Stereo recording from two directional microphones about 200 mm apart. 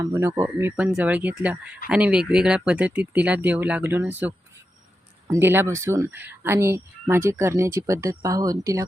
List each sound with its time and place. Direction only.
0.0 s speech: 15° right (ahead or behind)